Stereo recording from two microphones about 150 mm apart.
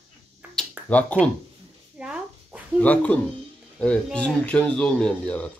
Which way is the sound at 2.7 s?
10° left (ahead or behind).